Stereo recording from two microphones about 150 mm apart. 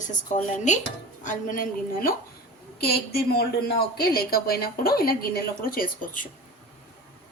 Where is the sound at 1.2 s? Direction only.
60° left (ahead or behind).